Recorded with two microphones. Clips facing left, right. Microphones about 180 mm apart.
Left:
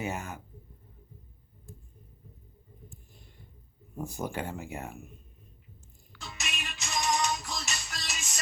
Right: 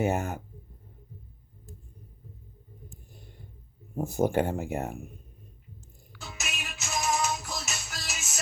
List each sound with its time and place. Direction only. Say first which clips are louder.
0.0 s speech: right 8 dB; 50° right (ahead or behind)
3.9 s speech: right 9 dB; 45° right (ahead or behind)
6.1 s music: right 1 dB; 5° right (ahead or behind)